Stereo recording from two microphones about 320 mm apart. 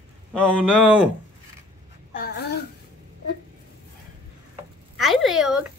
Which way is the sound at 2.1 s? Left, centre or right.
Left.